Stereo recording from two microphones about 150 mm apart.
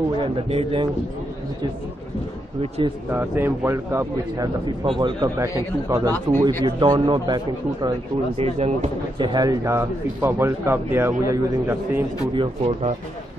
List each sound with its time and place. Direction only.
0.2 s speech: 40° right (ahead or behind)
3.1 s speech: 15° right (ahead or behind)
4.8 s a man's voice: 30° right (ahead or behind)
8.4 s speech: 45° right (ahead or behind)
9.2 s speech: 25° right (ahead or behind)
12.4 s speech: 45° right (ahead or behind)